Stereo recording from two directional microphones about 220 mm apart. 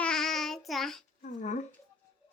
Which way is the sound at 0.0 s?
Centre (ahead or behind).